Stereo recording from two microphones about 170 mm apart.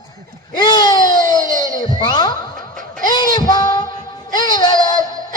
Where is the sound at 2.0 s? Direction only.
25° left (ahead or behind).